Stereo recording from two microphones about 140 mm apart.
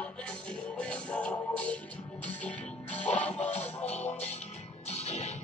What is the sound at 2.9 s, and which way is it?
Music, 10° left (ahead or behind).